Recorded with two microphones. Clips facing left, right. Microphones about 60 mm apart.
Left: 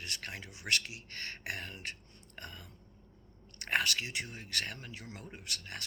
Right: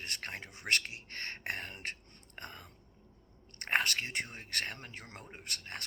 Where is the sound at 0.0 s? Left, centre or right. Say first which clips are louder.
Right 1 dB; right.